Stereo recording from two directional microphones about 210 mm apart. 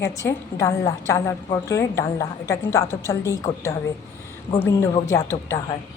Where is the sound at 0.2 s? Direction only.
15° left (ahead or behind).